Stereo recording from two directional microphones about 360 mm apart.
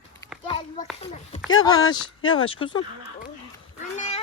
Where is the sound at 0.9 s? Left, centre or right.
Centre.